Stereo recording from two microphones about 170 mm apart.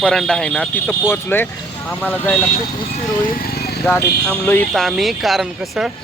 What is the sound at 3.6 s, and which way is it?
Vehicle, 70° left (ahead or behind).